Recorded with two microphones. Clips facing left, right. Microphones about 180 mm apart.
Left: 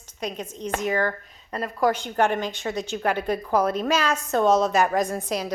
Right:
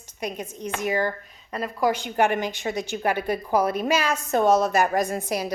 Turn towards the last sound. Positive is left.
turn(degrees=-10)  # may be behind; listen again after turning